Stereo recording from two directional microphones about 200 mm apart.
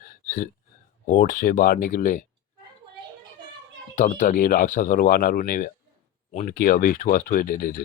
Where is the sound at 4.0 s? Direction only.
35° left (ahead or behind).